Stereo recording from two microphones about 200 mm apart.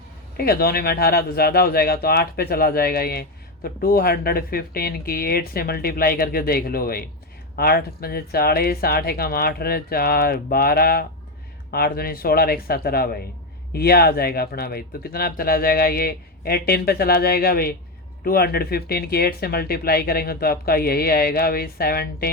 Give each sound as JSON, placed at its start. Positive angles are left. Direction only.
{"t": 0.3, "sound": "speech", "side_deg": 50}